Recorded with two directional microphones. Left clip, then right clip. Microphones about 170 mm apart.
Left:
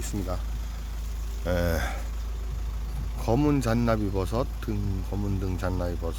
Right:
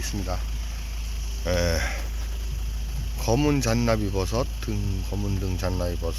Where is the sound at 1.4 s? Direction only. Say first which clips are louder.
Right 2 dB; 5° left (ahead or behind).